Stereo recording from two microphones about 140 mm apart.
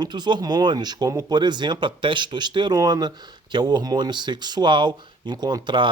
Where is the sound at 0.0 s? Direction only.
30° right (ahead or behind).